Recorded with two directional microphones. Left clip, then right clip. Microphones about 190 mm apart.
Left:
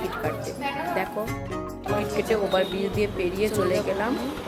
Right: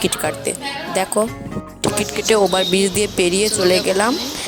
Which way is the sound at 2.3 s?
60° right (ahead or behind).